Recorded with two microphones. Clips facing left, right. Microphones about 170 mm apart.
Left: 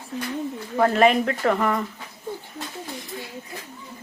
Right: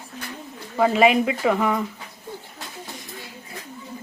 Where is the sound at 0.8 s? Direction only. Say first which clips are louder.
Right 1 dB; 5° right (ahead or behind).